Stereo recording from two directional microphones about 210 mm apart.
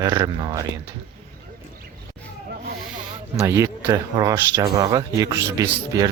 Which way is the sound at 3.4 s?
10° right (ahead or behind).